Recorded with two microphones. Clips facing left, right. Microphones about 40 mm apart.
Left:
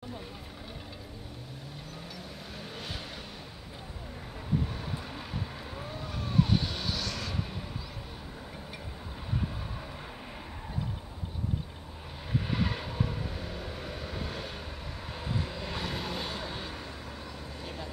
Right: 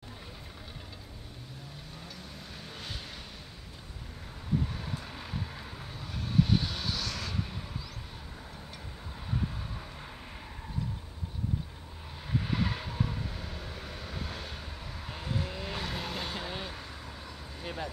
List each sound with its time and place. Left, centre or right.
2.7 s vehicle: centre
4.6 s vehicle: centre
9.3 s vehicle: centre
12.3 s vehicle: centre
16.4 s vehicle: centre
16.7 s vehicle: centre